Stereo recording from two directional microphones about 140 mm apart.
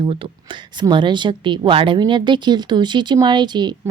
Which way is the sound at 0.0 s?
35° right (ahead or behind).